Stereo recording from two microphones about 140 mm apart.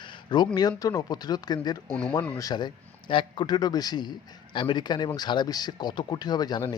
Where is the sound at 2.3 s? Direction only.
30° left (ahead or behind).